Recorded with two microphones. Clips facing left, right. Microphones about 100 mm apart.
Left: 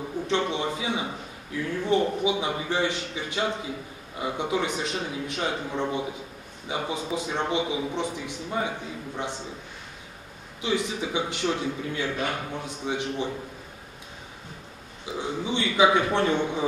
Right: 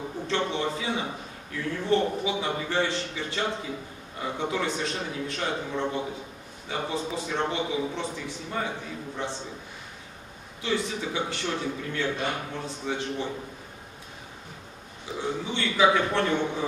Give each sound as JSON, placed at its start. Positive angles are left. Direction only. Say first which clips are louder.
{"t": 0.3, "sound": "a man's voice", "louder": "left 1 dB", "side_deg": 15}
{"t": 10.6, "sound": "a man's voice", "louder": "left 1 dB", "side_deg": 15}
{"t": 15.1, "sound": "a man's voice", "louder": "left 2 dB", "side_deg": 15}